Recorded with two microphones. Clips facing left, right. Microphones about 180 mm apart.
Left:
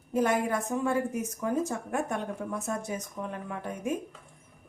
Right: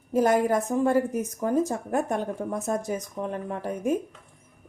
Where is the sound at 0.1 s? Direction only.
40° right (ahead or behind).